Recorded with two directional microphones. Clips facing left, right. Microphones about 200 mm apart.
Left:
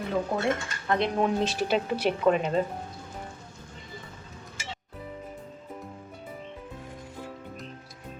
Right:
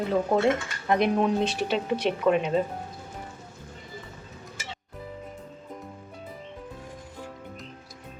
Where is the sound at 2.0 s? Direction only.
Centre (ahead or behind).